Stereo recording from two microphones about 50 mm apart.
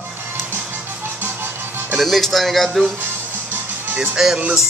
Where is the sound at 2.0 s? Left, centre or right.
Centre.